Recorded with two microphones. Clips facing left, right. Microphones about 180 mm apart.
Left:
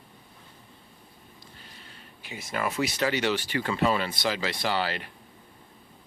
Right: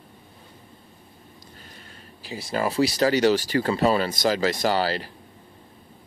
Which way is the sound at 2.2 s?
35° right (ahead or behind).